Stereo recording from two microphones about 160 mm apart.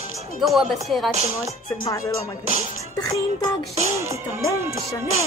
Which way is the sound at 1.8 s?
20° left (ahead or behind).